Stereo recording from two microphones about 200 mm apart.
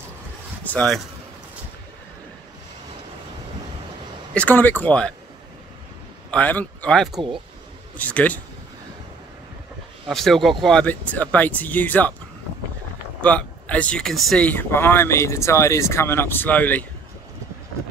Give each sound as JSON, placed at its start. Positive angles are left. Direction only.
{"t": 0.7, "sound": "speech", "side_deg": 5}
{"t": 4.3, "sound": "speech", "side_deg": 5}
{"t": 6.3, "sound": "speech", "side_deg": 5}
{"t": 10.0, "sound": "speech", "side_deg": 0}
{"t": 13.2, "sound": "speech", "side_deg": 5}